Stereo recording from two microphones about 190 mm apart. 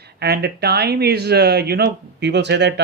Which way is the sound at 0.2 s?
60° right (ahead or behind).